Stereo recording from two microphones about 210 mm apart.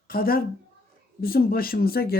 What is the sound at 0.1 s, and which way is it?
Speech, 45° left (ahead or behind).